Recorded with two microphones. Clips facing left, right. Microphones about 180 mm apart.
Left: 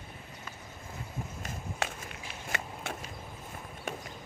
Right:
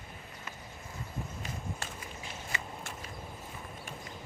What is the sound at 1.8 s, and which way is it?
Walk, 65° left (ahead or behind).